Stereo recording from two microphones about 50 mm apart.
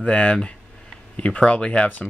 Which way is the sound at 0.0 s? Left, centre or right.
Left.